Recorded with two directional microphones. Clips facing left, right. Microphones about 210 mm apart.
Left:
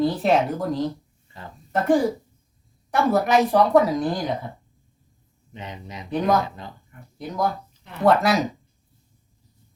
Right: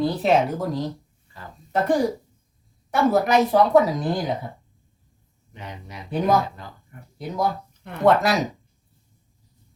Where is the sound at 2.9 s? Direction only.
Centre (ahead or behind).